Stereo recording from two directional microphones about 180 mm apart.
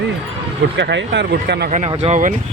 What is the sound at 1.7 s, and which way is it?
Speech, 40° right (ahead or behind).